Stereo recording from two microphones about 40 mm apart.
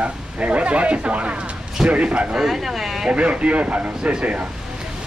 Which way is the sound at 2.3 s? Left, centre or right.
Centre.